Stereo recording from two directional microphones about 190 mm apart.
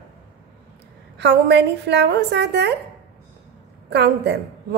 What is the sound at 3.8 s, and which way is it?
Speech, 65° right (ahead or behind).